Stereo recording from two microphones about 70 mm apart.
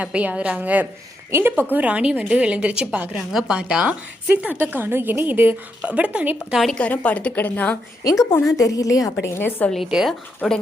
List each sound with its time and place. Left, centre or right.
0.0 s a woman's voice: centre
1.7 s a woman's voice: centre
3.2 s a woman's voice: centre; by 5.5 s right
5.8 s a woman's voice: centre
6.7 s a woman's voice: centre
8.4 s a woman's voice: left
9.2 s a woman's voice: left
10.1 s speech: centre